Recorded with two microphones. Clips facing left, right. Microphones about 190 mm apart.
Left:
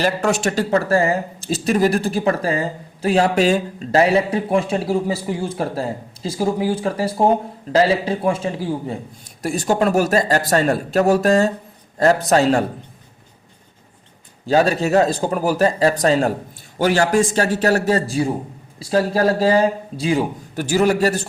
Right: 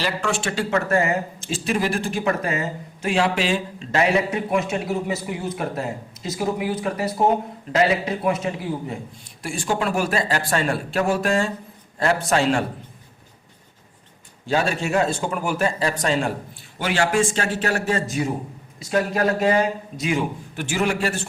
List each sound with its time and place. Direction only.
0.0 s speech: 40° left (ahead or behind)
14.4 s speech: 40° left (ahead or behind)